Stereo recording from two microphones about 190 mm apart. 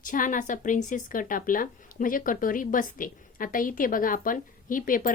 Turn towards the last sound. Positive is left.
turn(degrees=45)  # may be behind; listen again after turning